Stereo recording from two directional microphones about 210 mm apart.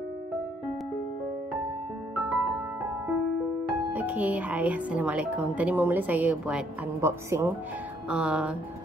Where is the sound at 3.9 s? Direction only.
5° right (ahead or behind).